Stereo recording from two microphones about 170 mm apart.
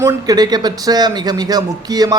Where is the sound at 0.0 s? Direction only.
25° right (ahead or behind).